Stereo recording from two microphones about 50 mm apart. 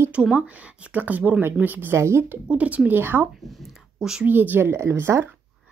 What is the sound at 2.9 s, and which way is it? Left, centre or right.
Speech, right.